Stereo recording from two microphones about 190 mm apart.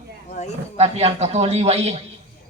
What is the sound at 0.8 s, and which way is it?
Speech, 35° right (ahead or behind).